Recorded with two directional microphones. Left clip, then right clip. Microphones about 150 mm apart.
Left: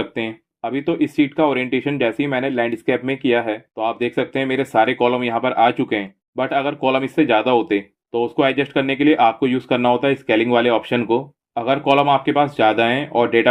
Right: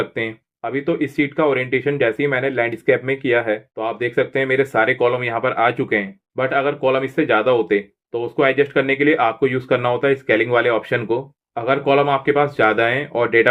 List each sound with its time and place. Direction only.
0.1 s speech: 35° left (ahead or behind)